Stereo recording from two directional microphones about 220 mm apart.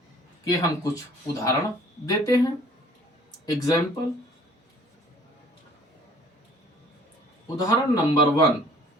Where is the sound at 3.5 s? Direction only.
15° left (ahead or behind).